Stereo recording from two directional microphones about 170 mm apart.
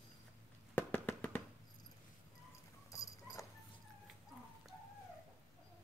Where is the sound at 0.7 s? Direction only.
10° left (ahead or behind).